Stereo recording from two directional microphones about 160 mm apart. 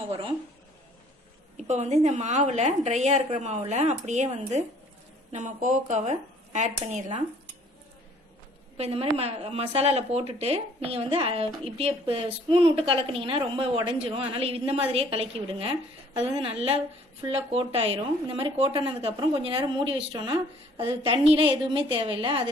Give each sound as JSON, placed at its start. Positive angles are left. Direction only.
{"t": 1.7, "sound": "a woman's voice", "side_deg": -45}
{"t": 8.7, "sound": "speech", "side_deg": -40}